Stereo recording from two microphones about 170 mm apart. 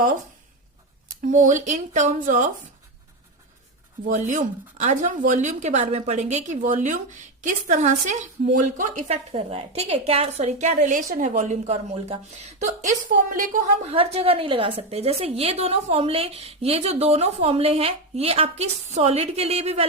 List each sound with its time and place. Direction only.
1.3 s a woman's voice: 45° right (ahead or behind)
4.1 s a woman's voice: 45° right (ahead or behind)
13.9 s a woman's voice: 35° right (ahead or behind)